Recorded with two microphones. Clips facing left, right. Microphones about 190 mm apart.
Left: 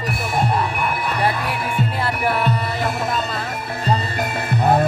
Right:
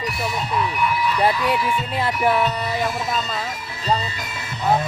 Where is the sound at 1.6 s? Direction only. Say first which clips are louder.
Even; 55° left (ahead or behind).